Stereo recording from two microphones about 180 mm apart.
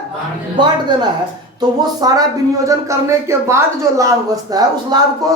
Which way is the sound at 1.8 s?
20° right (ahead or behind).